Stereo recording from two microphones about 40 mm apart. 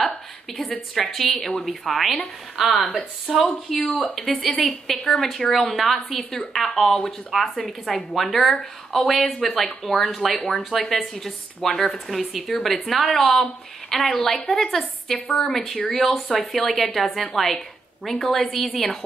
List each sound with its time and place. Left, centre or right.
0.0 s a woman's voice: centre
2.6 s speech: centre
3.7 s a woman's voice: centre
15.1 s a woman's voice: left
15.4 s a woman's voice: centre